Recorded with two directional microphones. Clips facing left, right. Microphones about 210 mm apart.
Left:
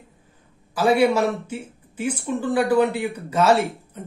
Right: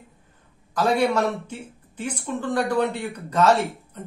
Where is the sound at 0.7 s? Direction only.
10° left (ahead or behind).